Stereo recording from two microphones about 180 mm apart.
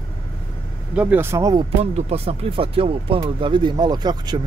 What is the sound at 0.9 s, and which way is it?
Speech, 10° right (ahead or behind).